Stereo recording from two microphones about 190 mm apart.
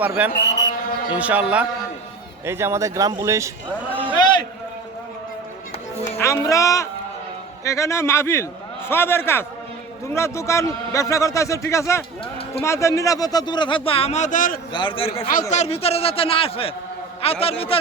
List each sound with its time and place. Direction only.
0.0 s speech: 10° right (ahead or behind)
0.3 s mantra: 65° left (ahead or behind)
1.1 s speech: 5° right (ahead or behind)
4.2 s a sound: 25° left (ahead or behind)
6.1 s a man's voice: 15° left (ahead or behind); by 14.6 s 45° left (ahead or behind)
14.7 s speech: 25° left (ahead or behind)
15.3 s a man's voice: 40° left (ahead or behind)